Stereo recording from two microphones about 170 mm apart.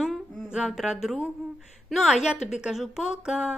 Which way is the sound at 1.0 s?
Centre (ahead or behind).